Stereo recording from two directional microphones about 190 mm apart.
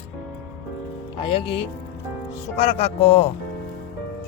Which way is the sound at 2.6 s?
35° left (ahead or behind).